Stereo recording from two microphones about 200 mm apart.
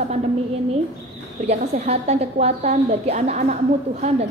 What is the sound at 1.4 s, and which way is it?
A woman's voice, 35° right (ahead or behind).